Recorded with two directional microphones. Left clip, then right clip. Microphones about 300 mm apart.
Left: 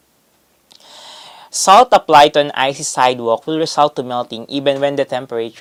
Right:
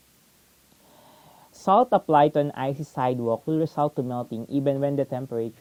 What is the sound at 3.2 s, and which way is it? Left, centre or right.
Speech, left.